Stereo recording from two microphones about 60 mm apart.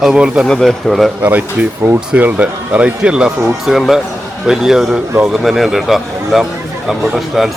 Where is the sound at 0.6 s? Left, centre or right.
Centre.